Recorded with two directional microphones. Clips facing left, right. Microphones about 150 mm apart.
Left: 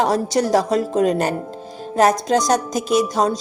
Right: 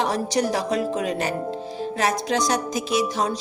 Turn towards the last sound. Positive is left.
turn(degrees=45)  # may be behind; listen again after turning